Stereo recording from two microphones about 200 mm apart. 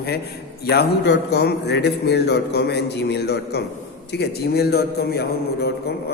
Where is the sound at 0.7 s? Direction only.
55° left (ahead or behind).